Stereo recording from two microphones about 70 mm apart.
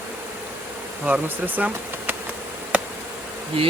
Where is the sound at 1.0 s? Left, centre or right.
Right.